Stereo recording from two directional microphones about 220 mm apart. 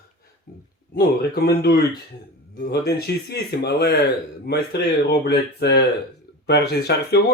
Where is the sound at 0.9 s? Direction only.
45° left (ahead or behind).